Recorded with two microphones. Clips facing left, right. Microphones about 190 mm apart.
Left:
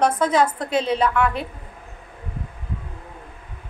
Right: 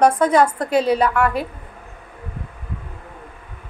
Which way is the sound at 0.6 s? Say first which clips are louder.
Right 4 dB; 5° right (ahead or behind).